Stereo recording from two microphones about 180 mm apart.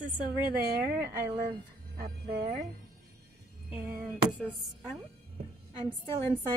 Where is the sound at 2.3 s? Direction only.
55° right (ahead or behind).